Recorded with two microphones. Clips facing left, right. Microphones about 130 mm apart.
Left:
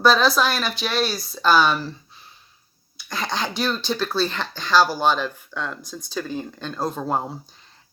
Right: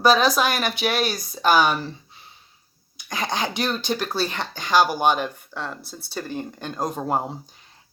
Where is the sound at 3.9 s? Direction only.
15° right (ahead or behind).